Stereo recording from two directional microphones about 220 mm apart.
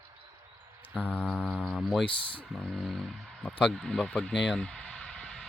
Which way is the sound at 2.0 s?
25° left (ahead or behind).